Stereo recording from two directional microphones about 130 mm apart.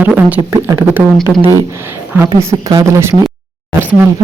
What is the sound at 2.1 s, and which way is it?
A woman's voice, 20° right (ahead or behind).